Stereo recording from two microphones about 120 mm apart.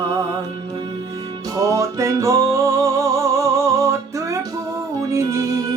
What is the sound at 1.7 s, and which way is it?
Music, 25° right (ahead or behind).